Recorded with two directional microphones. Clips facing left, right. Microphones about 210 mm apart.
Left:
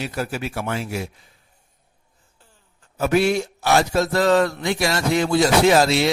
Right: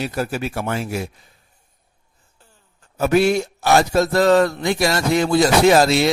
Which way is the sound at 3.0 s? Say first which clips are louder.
Right 2 dB; 40° right (ahead or behind).